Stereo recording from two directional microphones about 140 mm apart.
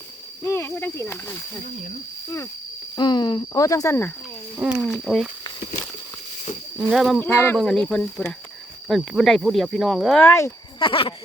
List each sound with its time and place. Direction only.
0.4 s speech: 15° left (ahead or behind)
2.9 s speech: 30° left (ahead or behind)
4.8 s speech: 5° left (ahead or behind)
6.7 s speech: centre (ahead or behind)
7.2 s speech: 10° left (ahead or behind)
10.2 s speech: 20° left (ahead or behind)
10.8 s speech: 40° left (ahead or behind)